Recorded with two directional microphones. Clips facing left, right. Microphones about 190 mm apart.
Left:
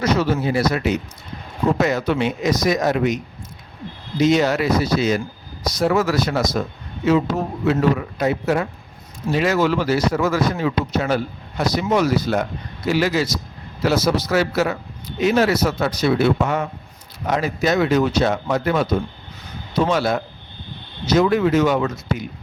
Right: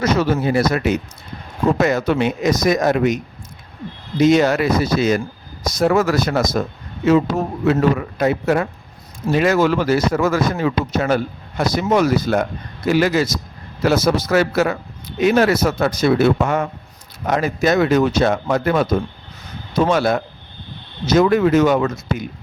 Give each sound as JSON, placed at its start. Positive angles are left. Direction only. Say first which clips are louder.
{"t": 0.0, "sound": "speech", "louder": "right 2 dB", "side_deg": -50}
{"t": 4.2, "sound": "speech", "louder": "right 3 dB", "side_deg": -50}